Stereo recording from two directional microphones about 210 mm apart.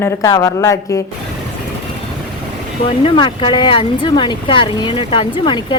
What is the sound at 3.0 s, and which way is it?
Speech, 20° left (ahead or behind).